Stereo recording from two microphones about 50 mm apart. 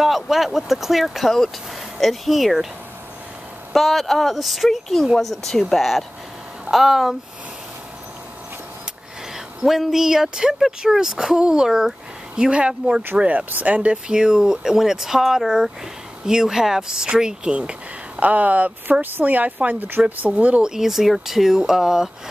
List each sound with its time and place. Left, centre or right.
0.0 s speech: centre
3.7 s speech: centre
9.7 s speech: centre; by 19.2 s right
19.2 s speech: right
20.6 s speech: centre